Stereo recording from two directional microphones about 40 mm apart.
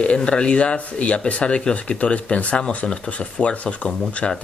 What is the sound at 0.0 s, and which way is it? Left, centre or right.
Speech, left.